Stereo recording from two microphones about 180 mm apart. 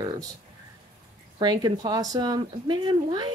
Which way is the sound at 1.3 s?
25° right (ahead or behind).